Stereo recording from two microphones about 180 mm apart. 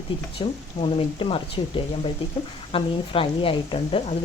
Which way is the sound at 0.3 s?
30° left (ahead or behind).